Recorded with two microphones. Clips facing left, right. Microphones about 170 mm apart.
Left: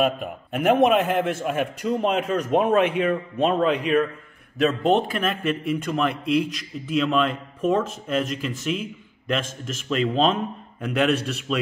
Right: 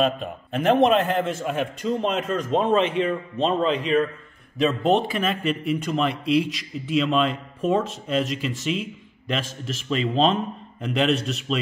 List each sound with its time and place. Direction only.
0.0 s a man's voice: 10° left (ahead or behind)
9.4 s a man's voice: 45° left (ahead or behind)
9.8 s speech: centre (ahead or behind)